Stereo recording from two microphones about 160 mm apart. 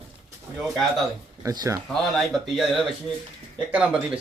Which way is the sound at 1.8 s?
Centre (ahead or behind).